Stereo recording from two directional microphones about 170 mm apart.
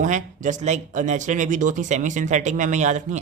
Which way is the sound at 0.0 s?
45° right (ahead or behind).